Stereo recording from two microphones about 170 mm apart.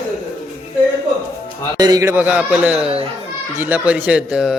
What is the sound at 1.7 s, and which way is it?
A man's voice, 20° right (ahead or behind).